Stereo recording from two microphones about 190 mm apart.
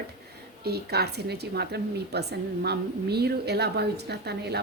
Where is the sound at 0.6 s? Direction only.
55° right (ahead or behind).